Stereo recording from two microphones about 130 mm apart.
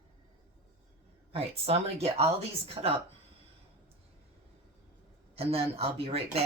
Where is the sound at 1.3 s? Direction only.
50° right (ahead or behind).